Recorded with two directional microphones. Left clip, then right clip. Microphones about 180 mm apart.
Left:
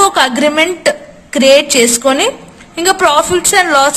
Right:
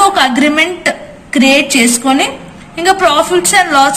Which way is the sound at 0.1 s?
40° left (ahead or behind).